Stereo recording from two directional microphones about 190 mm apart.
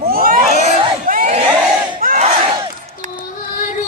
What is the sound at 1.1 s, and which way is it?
Crowd, 40° right (ahead or behind).